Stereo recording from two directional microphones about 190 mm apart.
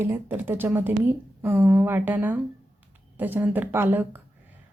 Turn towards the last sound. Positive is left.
turn(degrees=-10)  # may be behind; listen again after turning